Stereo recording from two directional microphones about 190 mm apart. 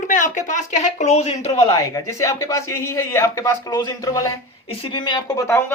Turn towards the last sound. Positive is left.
turn(degrees=15)  # may be behind; listen again after turning